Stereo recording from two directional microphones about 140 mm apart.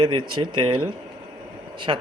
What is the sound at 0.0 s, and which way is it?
Frying, 35° right (ahead or behind).